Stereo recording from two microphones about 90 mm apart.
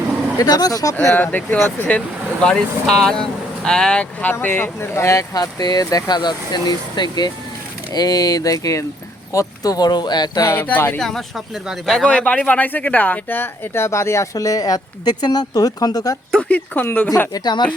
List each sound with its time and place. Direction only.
0.3 s speech: 45° left (ahead or behind)
1.1 s speech: 20° left (ahead or behind)
2.4 s speech: 10° left (ahead or behind); by 5.2 s 30° left (ahead or behind)
5.3 s speech: 45° left (ahead or behind)
10.4 s speech: 30° left (ahead or behind)
10.9 s speech: 5° left (ahead or behind)
12.0 s speech: 15° left (ahead or behind); by 16.1 s 45° left (ahead or behind)
16.3 s speech: 15° left (ahead or behind)
17.3 s speech: 50° left (ahead or behind)